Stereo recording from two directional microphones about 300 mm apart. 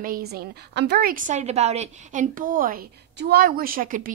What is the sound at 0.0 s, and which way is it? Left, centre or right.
Speech, right.